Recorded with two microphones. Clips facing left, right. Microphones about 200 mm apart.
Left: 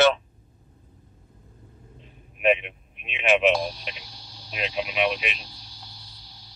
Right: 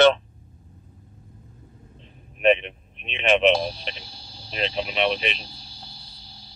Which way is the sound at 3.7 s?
30° right (ahead or behind).